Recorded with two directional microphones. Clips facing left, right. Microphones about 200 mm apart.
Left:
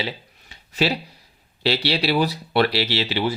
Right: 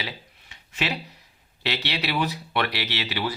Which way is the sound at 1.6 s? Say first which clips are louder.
Left 7 dB; 30° left (ahead or behind).